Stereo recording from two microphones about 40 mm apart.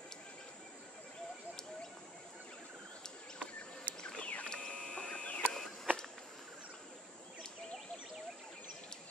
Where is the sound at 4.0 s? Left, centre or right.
Left.